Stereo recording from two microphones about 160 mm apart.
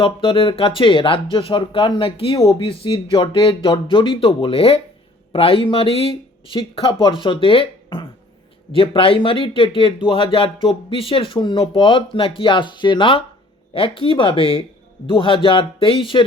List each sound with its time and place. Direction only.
0.0 s speech: 35° left (ahead or behind)